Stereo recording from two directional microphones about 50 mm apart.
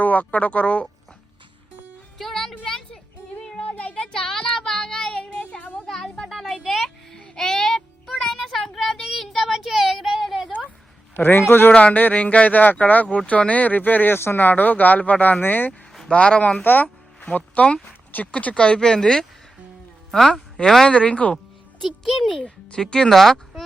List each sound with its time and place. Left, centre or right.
0.0 s speech: left
2.1 s music: centre
3.6 s child singing: left
5.4 s a sound: left
6.2 s a sound: centre
7.3 s child singing: centre
11.2 s a man's voice: left
11.7 s speech: left
16.0 s speech: left
16.6 s speech: left; by 20.4 s centre
20.8 s speech: left
21.8 s speech: centre
22.4 s speech: centre